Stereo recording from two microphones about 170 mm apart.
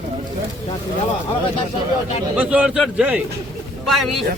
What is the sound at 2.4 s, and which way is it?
A man's voice, 5° right (ahead or behind).